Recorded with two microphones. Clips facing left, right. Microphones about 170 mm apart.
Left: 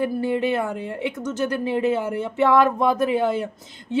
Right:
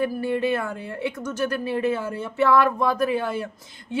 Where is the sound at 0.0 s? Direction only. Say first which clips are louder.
Left 1 dB; 20° left (ahead or behind).